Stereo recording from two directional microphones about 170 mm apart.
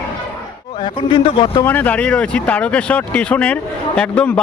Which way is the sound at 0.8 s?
25° left (ahead or behind).